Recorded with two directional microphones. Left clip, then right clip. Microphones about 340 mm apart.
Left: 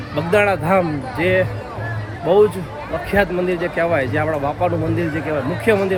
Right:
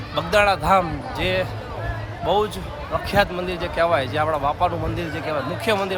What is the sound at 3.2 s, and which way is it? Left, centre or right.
Speech, centre.